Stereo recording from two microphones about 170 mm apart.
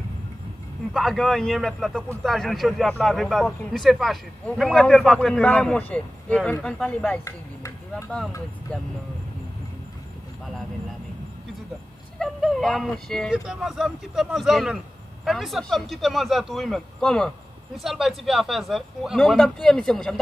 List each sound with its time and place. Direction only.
0.9 s a man's voice: centre (ahead or behind)
12.2 s a man's voice: centre (ahead or behind)